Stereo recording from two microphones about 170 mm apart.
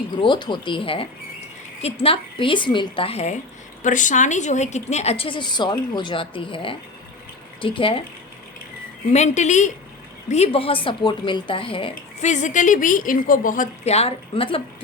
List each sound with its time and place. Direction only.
0.2 s a woman's voice: 25° left (ahead or behind)
3.8 s a woman's voice: 50° left (ahead or behind); by 8.0 s 30° left (ahead or behind)
9.1 s a woman's voice: 45° left (ahead or behind)